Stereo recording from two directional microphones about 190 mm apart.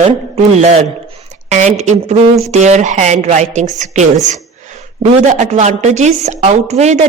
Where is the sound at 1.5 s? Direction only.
35° right (ahead or behind).